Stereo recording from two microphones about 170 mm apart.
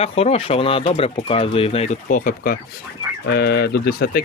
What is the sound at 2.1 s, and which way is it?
Speech, 55° left (ahead or behind).